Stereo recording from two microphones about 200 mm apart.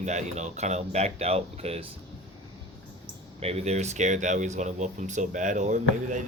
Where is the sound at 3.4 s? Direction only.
30° right (ahead or behind).